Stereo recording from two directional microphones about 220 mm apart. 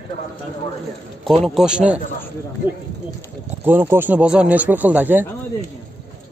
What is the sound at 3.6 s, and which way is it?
Speech, 10° right (ahead or behind).